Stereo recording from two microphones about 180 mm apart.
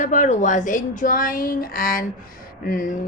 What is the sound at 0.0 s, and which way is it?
A woman's voice, 45° left (ahead or behind).